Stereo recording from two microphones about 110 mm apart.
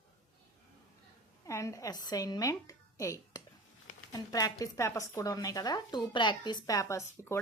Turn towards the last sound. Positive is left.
turn(degrees=25)  # may be behind; listen again after turning